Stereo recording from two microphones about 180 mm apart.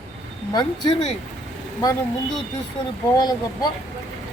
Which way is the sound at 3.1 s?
20° left (ahead or behind).